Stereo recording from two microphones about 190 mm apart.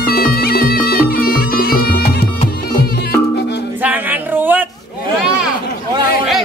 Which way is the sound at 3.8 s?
10° right (ahead or behind).